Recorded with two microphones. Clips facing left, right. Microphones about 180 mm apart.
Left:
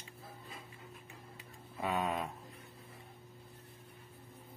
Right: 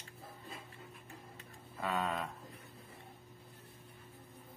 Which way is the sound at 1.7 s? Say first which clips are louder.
Left 1 dB; 20° left (ahead or behind).